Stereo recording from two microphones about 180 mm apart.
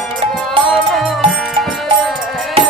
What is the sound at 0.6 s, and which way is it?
Music, centre (ahead or behind).